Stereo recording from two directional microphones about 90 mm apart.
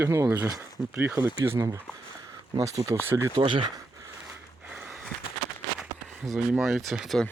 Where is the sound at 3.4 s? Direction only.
70° right (ahead or behind).